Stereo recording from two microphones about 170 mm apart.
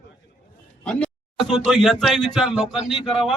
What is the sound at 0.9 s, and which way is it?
A man's voice, 5° left (ahead or behind).